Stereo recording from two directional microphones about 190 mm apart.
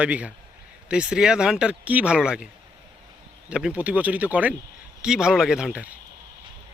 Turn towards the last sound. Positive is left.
turn(degrees=-5)  # may be behind; listen again after turning